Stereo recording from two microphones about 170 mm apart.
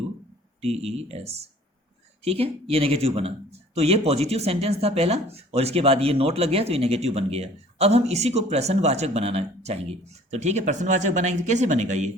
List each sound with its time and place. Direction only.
0.6 s speech: 35° right (ahead or behind)